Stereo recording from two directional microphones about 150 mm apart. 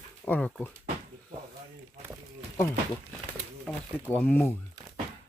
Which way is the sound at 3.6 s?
10° left (ahead or behind).